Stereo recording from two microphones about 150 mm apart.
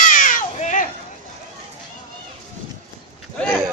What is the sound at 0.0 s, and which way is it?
Baby cry, 60° left (ahead or behind).